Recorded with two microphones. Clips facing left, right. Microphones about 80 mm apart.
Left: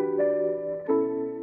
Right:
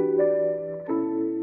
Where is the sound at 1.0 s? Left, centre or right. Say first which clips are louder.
Right 1 dB; right.